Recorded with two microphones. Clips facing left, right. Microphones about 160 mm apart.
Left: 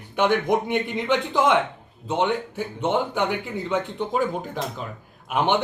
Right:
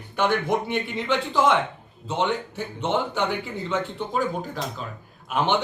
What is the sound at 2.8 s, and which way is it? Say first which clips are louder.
A man's voice: left 1 dB; 10° left (ahead or behind).